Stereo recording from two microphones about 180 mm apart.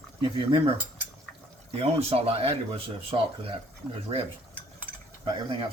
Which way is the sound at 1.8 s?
35° right (ahead or behind).